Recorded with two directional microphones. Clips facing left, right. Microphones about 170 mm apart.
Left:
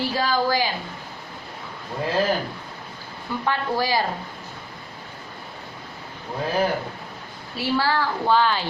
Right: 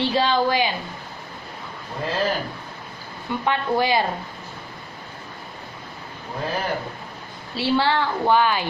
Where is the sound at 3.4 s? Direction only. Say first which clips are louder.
Right 3 dB; 20° right (ahead or behind).